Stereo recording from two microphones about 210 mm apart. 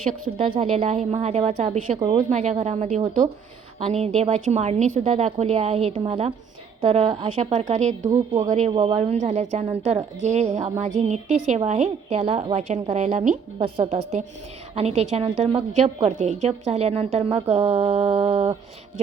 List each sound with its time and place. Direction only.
0.5 s a woman's voice: 25° right (ahead or behind)
14.8 s a woman's voice: 30° right (ahead or behind)